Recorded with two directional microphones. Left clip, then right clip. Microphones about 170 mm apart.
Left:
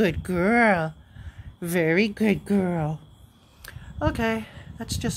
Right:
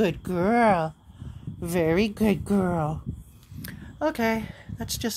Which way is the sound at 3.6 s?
20° right (ahead or behind).